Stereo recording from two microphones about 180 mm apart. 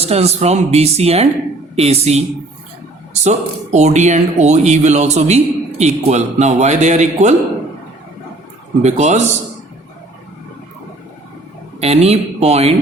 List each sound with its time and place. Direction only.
0.0 s speech: 35° right (ahead or behind)
8.8 s speech: 40° right (ahead or behind)
11.8 s speech: 35° right (ahead or behind)